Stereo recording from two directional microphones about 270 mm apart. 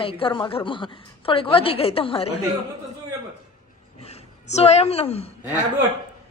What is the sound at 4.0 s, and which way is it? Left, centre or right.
A woman's voice, left.